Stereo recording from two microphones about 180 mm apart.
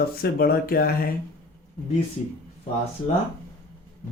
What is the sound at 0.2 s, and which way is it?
Speech, 60° left (ahead or behind).